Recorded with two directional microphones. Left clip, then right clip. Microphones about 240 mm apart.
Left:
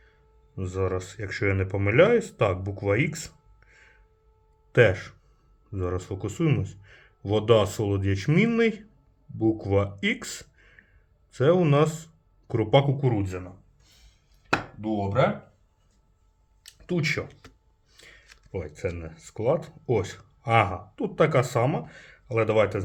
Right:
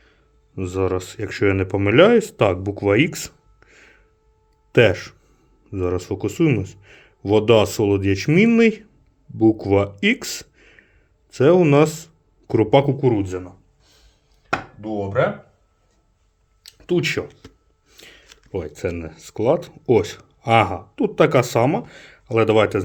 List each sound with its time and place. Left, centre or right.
0.0 s speech: right
10.0 s a sound: right
11.3 s speech: right
14.8 s speech: centre
16.6 s a sound: right
17.8 s speech: right